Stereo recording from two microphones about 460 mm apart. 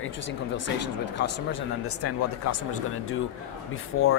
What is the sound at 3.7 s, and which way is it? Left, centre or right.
Speech, left.